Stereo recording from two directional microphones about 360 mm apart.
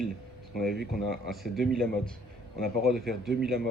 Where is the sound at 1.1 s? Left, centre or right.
Centre.